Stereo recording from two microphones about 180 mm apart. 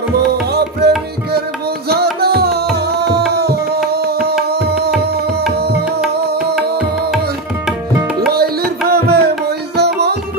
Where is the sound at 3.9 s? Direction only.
60° right (ahead or behind).